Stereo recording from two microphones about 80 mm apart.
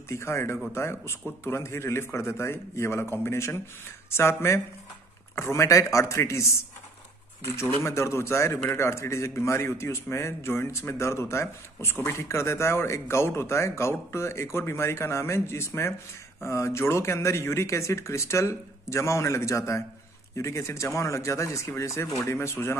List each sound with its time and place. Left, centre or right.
0.1 s a man's voice: left